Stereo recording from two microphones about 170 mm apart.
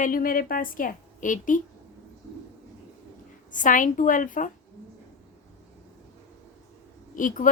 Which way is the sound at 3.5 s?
50° left (ahead or behind).